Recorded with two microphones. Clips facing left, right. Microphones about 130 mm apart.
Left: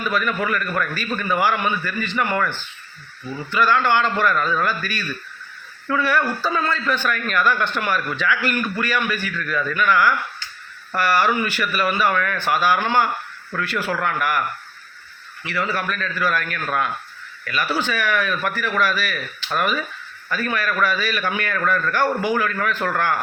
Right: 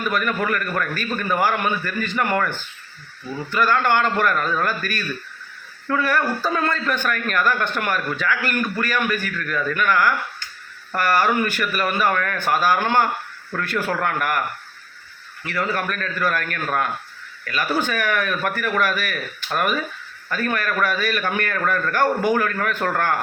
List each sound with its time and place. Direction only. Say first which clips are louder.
0.1 s a man's voice: even; 45° right (ahead or behind)
15.4 s a man's voice: even; 45° right (ahead or behind)